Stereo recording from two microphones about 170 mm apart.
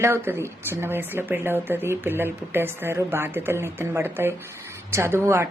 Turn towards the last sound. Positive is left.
turn(degrees=-15)  # may be behind; listen again after turning